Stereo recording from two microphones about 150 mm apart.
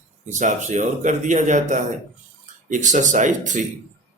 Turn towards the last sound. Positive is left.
turn(degrees=-55)  # may be behind; listen again after turning